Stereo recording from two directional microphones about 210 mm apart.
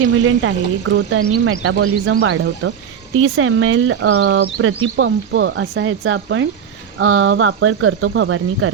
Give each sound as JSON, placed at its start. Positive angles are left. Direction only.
{"t": 0.0, "sound": "speech", "side_deg": -75}
{"t": 3.2, "sound": "speech", "side_deg": -75}
{"t": 4.2, "sound": "speech", "side_deg": -60}